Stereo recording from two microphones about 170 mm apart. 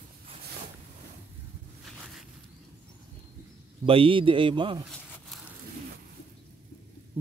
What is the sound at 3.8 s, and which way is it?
A man's voice, 30° right (ahead or behind).